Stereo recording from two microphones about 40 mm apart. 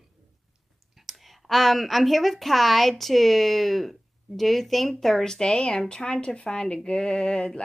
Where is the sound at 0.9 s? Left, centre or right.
Centre.